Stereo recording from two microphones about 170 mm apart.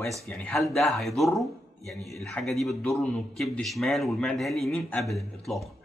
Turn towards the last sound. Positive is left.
turn(degrees=0)  # may be behind; listen again after turning